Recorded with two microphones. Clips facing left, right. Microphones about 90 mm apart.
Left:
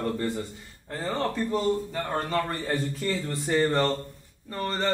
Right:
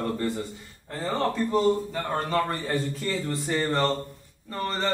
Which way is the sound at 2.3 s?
20° right (ahead or behind).